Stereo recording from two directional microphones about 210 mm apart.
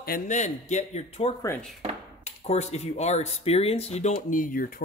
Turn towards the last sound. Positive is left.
turn(degrees=40)  # may be behind; listen again after turning